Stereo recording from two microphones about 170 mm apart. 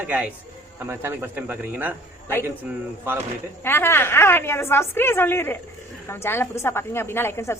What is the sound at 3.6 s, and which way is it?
A woman's voice, 15° left (ahead or behind).